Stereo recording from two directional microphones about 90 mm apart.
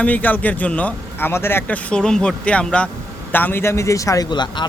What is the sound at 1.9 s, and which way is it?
A man's voice, 10° left (ahead or behind).